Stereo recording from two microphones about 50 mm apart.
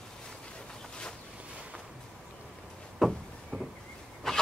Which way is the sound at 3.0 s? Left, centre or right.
Centre.